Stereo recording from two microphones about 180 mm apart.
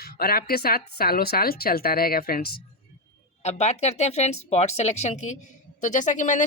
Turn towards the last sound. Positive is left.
turn(degrees=45)  # may be behind; listen again after turning